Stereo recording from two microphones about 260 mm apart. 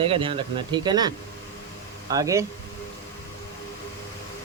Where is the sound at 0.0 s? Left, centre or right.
Right.